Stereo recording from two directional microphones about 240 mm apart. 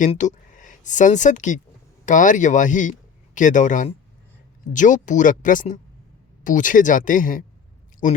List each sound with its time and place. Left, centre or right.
0.0 s speech: left